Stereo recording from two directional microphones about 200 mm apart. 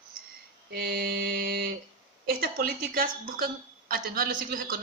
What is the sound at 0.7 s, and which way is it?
A man's voice, 55° right (ahead or behind).